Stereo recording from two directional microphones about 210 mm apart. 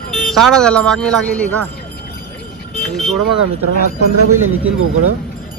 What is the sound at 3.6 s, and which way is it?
Speech, 90° right.